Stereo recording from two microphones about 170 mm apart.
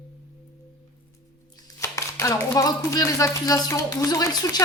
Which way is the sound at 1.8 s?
15° left (ahead or behind).